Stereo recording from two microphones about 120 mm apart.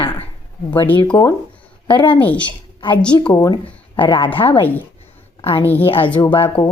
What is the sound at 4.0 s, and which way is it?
Speech, 45° left (ahead or behind).